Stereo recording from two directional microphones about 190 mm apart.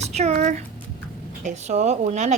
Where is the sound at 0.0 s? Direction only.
35° right (ahead or behind).